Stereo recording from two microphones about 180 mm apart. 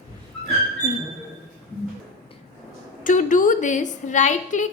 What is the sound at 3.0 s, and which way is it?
A woman's voice, 45° left (ahead or behind).